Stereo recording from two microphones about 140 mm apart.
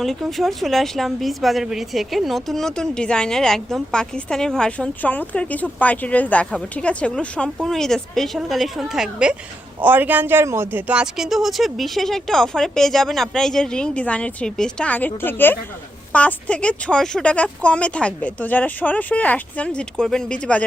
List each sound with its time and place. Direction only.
0.0 s a woman's voice: centre (ahead or behind)